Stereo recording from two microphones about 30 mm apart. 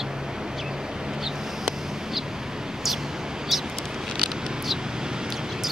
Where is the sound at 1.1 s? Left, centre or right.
Centre.